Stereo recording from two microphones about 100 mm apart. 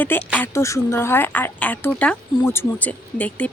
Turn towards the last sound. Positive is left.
turn(degrees=15)  # may be behind; listen again after turning